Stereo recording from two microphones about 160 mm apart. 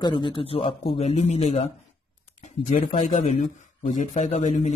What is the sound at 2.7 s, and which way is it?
A man's voice, 45° left (ahead or behind).